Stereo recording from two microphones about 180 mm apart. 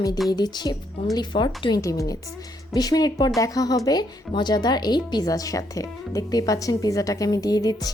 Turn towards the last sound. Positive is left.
turn(degrees=20)  # may be behind; listen again after turning